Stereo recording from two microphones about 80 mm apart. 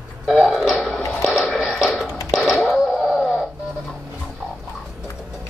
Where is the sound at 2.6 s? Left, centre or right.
Centre.